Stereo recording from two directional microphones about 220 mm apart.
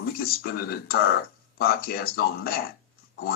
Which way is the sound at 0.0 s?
45° left (ahead or behind).